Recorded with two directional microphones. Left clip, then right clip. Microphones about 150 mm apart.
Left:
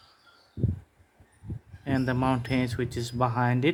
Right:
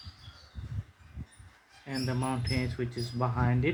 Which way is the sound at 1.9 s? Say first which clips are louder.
Left 7 dB; 90° left.